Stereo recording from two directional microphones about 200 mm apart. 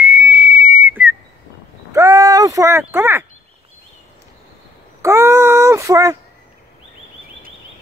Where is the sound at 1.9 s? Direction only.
15° right (ahead or behind).